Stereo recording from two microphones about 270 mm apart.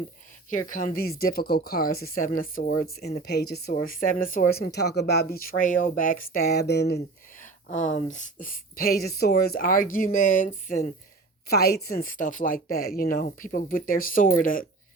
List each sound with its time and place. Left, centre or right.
0.5 s speech: left